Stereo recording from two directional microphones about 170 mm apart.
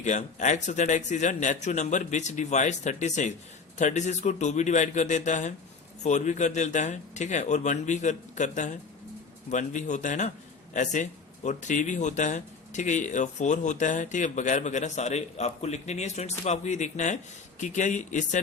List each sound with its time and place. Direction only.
0.0 s speech: 45° left (ahead or behind)